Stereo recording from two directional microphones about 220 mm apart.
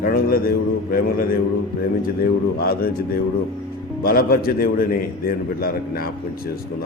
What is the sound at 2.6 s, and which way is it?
Speech, 45° left (ahead or behind).